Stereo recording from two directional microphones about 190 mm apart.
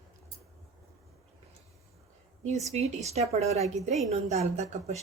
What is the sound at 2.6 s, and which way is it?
A woman's voice, 35° right (ahead or behind).